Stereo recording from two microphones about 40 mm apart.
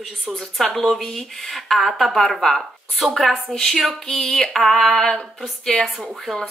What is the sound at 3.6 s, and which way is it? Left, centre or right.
Speech, centre.